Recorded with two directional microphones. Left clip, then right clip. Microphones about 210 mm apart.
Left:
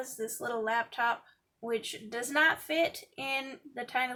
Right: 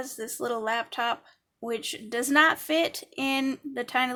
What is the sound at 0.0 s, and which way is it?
Speech, 45° right (ahead or behind).